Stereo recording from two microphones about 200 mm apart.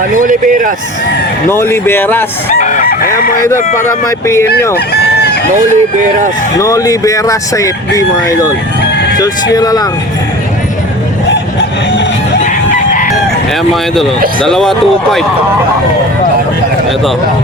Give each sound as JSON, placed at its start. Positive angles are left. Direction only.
{"t": 0.1, "sound": "speech", "side_deg": -40}
{"t": 1.5, "sound": "speech", "side_deg": 10}
{"t": 2.5, "sound": "chicken", "side_deg": 35}
{"t": 3.2, "sound": "speech", "side_deg": 45}
{"t": 3.5, "sound": "speech", "side_deg": 15}
{"t": 4.9, "sound": "chicken", "side_deg": 55}
{"t": 5.5, "sound": "speech", "side_deg": -40}
{"t": 6.6, "sound": "speech", "side_deg": 15}
{"t": 12.4, "sound": "chicken", "side_deg": 40}
{"t": 14.4, "sound": "speech", "side_deg": 0}